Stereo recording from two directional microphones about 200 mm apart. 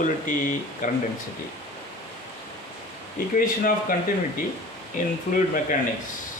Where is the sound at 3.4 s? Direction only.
45° left (ahead or behind).